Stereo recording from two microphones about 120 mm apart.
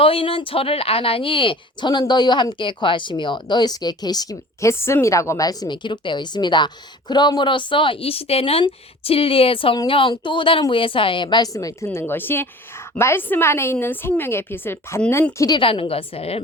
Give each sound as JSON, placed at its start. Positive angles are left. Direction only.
{"t": 0.0, "sound": "a woman's voice", "side_deg": 50}
{"t": 15.5, "sound": "speech", "side_deg": 50}